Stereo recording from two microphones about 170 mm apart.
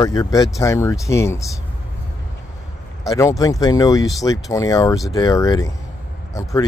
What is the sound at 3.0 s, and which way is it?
Speech, 20° left (ahead or behind).